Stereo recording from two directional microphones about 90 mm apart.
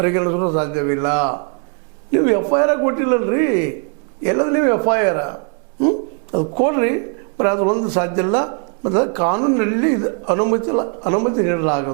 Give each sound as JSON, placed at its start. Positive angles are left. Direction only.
{"t": 0.0, "sound": "a woman's voice", "side_deg": -20}